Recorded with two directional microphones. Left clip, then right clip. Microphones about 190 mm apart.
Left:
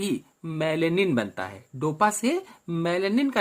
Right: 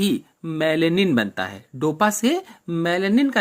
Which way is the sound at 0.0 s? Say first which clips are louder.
Right 6 dB; 20° right (ahead or behind).